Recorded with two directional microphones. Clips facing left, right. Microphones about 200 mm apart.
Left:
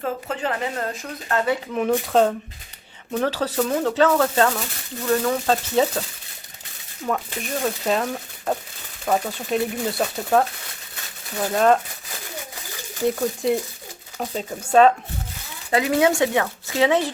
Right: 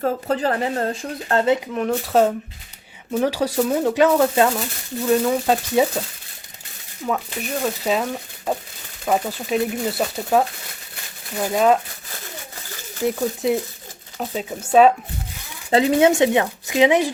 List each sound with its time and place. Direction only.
0.0 s a woman's voice: 40° right (ahead or behind)
1.7 s speech: centre (ahead or behind)
7.1 s speech: 5° right (ahead or behind)
13.1 s speech: 5° right (ahead or behind)
15.7 s speech: 25° right (ahead or behind)